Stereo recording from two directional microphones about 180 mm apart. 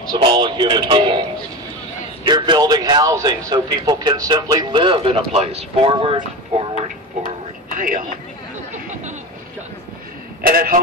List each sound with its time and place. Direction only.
0.2 s a man's voice: 25° right (ahead or behind)
2.2 s a man's voice: 25° right (ahead or behind)
7.7 s speech: 50° right (ahead or behind)
10.4 s a man's voice: 55° right (ahead or behind)